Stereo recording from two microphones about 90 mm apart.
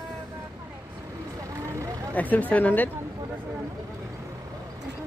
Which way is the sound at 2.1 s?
15° left (ahead or behind).